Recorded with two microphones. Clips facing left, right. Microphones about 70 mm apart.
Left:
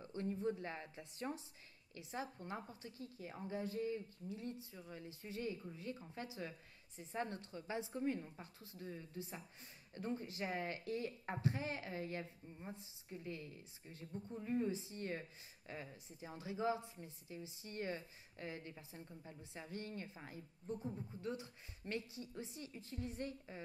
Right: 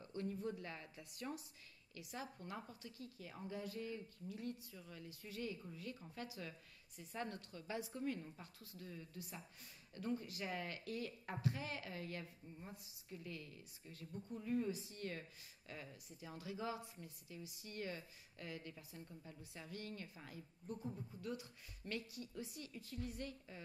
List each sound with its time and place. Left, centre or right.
0.0 s a woman's voice: left